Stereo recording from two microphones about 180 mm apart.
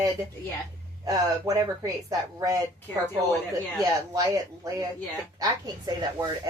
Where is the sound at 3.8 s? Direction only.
20° right (ahead or behind).